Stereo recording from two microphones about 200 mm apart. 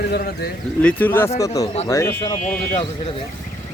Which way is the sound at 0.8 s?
10° left (ahead or behind).